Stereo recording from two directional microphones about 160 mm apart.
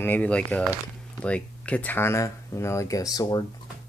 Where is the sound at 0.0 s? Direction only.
10° left (ahead or behind).